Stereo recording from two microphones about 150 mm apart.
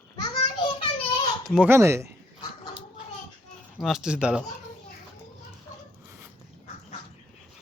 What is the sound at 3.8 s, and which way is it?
Speech, centre (ahead or behind).